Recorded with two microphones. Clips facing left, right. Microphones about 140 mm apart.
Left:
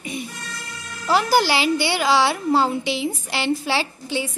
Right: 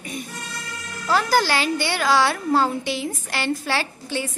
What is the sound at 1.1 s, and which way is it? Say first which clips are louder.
A woman's voice: left 2 dB; 10° left (ahead or behind).